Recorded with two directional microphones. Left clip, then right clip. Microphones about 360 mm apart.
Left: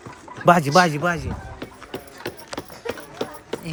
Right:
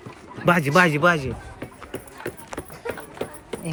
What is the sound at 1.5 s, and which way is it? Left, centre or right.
Clip-clop, left.